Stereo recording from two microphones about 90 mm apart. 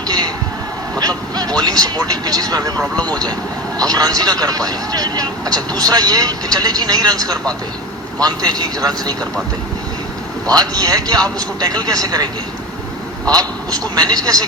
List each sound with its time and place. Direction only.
0.9 s speech: 45° right (ahead or behind)
3.8 s speech: 45° right (ahead or behind)
10.5 s speech: 45° right (ahead or behind)
13.3 s speech: 45° right (ahead or behind)